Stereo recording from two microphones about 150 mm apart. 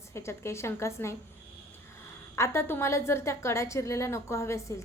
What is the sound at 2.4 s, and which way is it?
A woman's voice, 15° left (ahead or behind).